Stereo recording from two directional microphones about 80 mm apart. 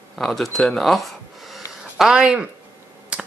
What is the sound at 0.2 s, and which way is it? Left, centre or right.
Speech, centre.